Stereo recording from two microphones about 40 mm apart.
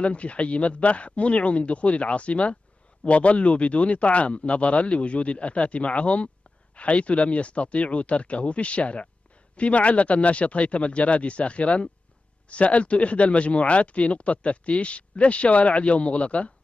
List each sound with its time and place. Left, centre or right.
0.0 s speech: left